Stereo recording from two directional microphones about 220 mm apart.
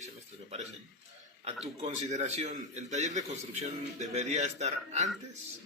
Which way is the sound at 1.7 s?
30° right (ahead or behind).